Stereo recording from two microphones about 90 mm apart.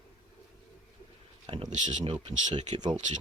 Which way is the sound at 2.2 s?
60° right (ahead or behind).